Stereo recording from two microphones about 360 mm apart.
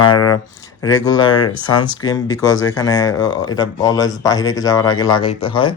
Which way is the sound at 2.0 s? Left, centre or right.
Centre.